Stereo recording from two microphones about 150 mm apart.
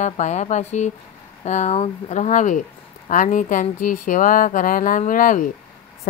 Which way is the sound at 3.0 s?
60° left (ahead or behind).